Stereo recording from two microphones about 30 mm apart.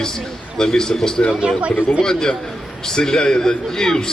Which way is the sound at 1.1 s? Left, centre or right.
Left.